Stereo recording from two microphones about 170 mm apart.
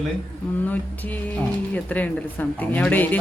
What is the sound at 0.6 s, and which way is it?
A woman's voice, 10° left (ahead or behind).